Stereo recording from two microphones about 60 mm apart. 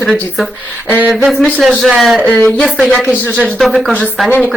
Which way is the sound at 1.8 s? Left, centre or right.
Centre.